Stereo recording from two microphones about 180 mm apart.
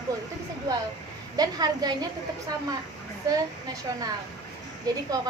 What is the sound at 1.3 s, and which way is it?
Speech, 20° right (ahead or behind).